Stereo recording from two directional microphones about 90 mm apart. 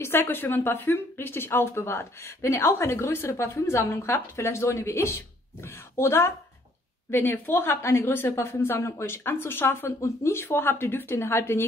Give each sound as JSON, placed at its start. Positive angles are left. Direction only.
{"t": 0.0, "sound": "speech", "side_deg": 25}